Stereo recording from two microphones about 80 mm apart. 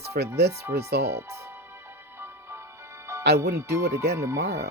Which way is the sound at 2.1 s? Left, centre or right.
Right.